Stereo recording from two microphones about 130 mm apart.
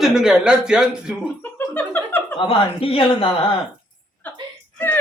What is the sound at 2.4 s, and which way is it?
A man's voice, 45° left (ahead or behind).